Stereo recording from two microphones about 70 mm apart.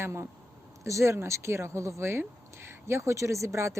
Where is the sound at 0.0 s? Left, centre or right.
Right.